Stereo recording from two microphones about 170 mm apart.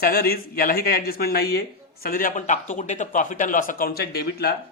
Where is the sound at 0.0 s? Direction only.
60° left (ahead or behind).